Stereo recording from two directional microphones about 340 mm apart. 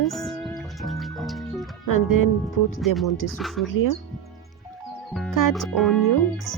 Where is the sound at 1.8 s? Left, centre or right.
Left.